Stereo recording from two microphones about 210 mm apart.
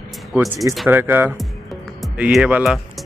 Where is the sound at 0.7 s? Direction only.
5° right (ahead or behind).